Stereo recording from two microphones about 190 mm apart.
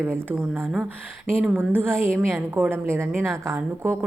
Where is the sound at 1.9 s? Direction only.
5° left (ahead or behind).